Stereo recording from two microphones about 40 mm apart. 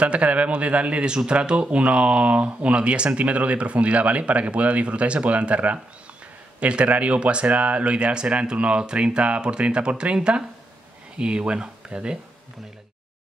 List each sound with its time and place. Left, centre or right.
0.0 s speech: right